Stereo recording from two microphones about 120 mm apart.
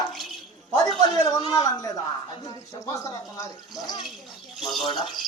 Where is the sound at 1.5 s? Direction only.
35° left (ahead or behind).